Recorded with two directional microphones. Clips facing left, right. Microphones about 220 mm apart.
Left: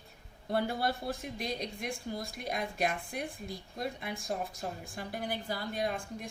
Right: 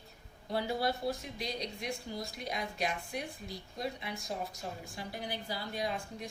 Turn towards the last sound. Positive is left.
turn(degrees=50)  # may be behind; listen again after turning